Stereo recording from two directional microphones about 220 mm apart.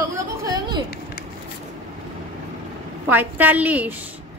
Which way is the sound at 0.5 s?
20° right (ahead or behind).